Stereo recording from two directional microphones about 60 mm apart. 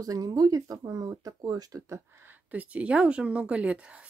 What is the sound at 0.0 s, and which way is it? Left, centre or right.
Speech, right.